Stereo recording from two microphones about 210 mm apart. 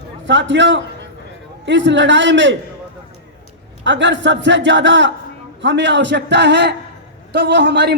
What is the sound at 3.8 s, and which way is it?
A man's voice, 60° right (ahead or behind).